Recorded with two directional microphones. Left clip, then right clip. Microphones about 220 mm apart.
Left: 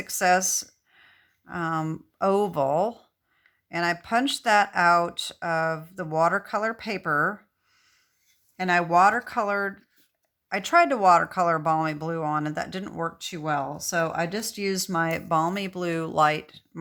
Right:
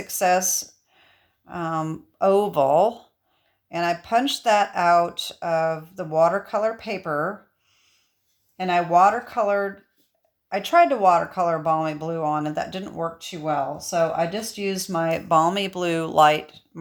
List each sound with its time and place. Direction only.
0.1 s speech: 20° left (ahead or behind)
8.5 s speech: 20° left (ahead or behind)
14.0 s speech: 25° left (ahead or behind)